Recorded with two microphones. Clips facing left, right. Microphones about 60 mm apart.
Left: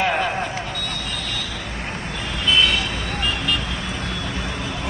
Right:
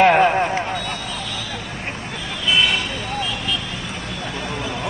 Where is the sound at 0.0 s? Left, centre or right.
Right.